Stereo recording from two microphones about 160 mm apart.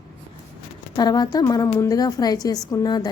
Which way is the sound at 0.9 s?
25° left (ahead or behind).